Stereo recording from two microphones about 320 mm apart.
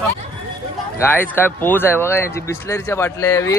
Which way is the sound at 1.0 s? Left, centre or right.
Centre.